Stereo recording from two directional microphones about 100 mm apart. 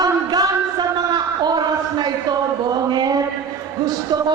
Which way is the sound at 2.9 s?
45° right (ahead or behind).